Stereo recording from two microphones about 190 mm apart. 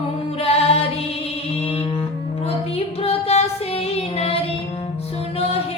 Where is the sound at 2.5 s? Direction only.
30° left (ahead or behind).